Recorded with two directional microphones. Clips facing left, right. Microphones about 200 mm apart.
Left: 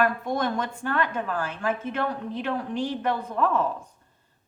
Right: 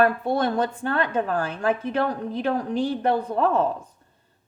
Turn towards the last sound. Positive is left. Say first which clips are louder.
# right 4 dB
turn(degrees=-35)  # may be behind; listen again after turning